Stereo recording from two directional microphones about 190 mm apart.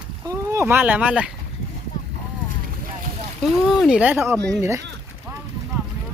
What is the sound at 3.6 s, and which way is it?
Speech, 5° right (ahead or behind).